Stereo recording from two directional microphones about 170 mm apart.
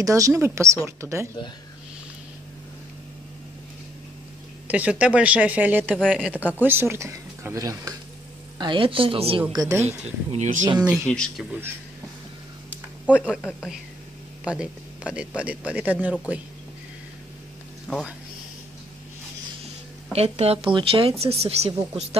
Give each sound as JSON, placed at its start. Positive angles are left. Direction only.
{"t": 0.0, "sound": "speech", "side_deg": -20}
{"t": 4.6, "sound": "speech", "side_deg": -10}
{"t": 5.9, "sound": "speech", "side_deg": 5}
{"t": 6.4, "sound": "speech", "side_deg": -10}
{"t": 9.6, "sound": "speech", "side_deg": -20}
{"t": 9.8, "sound": "speech", "side_deg": -40}
{"t": 11.1, "sound": "speech", "side_deg": 5}
{"t": 12.6, "sound": "a sound", "side_deg": -10}
{"t": 13.3, "sound": "a woman's voice", "side_deg": 5}
{"t": 14.4, "sound": "speech", "side_deg": -5}
{"t": 17.9, "sound": "speech", "side_deg": 5}
{"t": 20.1, "sound": "speech", "side_deg": -35}